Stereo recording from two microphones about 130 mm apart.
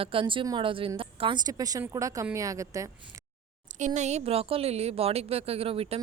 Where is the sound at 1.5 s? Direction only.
30° right (ahead or behind).